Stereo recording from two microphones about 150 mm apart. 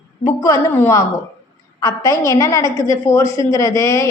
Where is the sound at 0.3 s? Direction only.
20° left (ahead or behind).